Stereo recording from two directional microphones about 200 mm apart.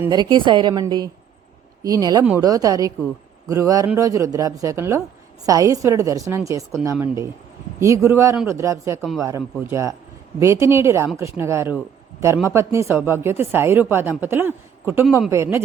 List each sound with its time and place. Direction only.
0.0 s a woman's voice: 20° right (ahead or behind)